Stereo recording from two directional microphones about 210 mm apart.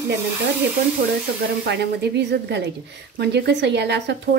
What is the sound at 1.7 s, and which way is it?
A woman's voice, 55° right (ahead or behind).